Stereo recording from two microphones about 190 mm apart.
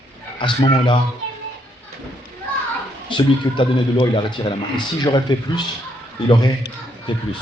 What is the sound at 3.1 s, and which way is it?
A man's voice, 25° left (ahead or behind).